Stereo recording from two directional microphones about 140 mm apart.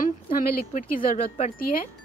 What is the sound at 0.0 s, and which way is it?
Speech, 90° left.